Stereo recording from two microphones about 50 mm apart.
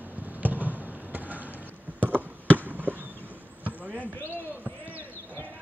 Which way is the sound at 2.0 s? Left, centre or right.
Right.